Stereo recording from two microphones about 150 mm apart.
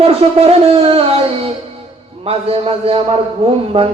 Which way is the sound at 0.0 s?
40° right (ahead or behind).